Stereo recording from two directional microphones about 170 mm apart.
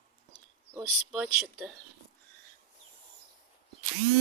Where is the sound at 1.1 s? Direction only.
Centre (ahead or behind).